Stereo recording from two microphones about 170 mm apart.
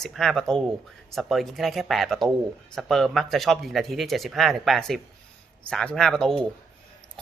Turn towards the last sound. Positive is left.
turn(degrees=5)  # may be behind; listen again after turning